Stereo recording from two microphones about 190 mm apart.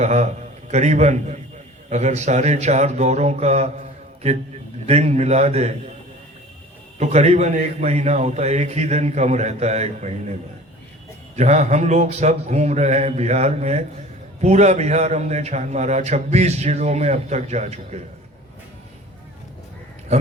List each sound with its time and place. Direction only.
0.0 s a man's voice: 40° right (ahead or behind)
7.0 s a man's voice: 35° right (ahead or behind)
11.3 s a man's voice: 35° right (ahead or behind)